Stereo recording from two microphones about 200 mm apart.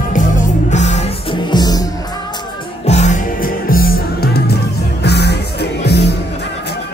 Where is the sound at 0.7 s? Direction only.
35° left (ahead or behind).